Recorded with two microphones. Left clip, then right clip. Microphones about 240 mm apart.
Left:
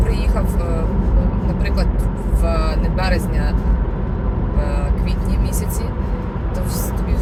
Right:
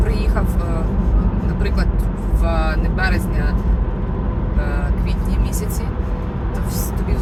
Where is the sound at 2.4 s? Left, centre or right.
Centre.